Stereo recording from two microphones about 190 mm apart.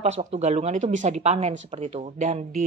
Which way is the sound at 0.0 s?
35° right (ahead or behind).